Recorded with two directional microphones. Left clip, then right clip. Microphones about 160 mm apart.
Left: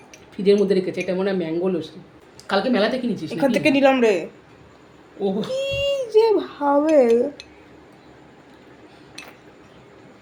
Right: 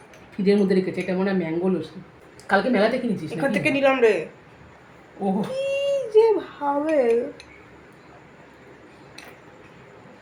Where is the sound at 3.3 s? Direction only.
90° left.